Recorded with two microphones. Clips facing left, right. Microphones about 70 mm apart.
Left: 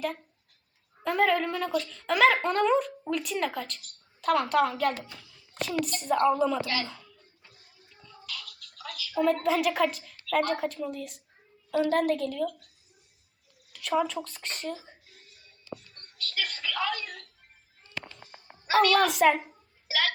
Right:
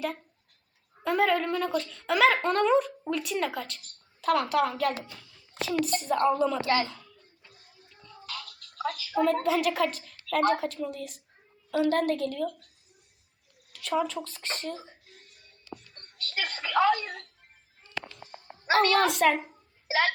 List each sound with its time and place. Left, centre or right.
1.0 s speech: centre
5.1 s a sound: centre
6.0 s speech: centre
8.3 s a sound: right
9.2 s speech: centre
13.7 s speech: centre
16.0 s music: right
18.6 s a child's voice: right
19.0 s speech: centre
19.9 s hiccup: right